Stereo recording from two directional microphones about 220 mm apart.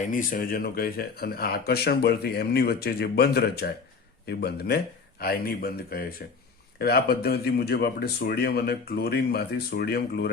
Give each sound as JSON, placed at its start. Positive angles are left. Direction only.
{"t": 0.1, "sound": "speech", "side_deg": 40}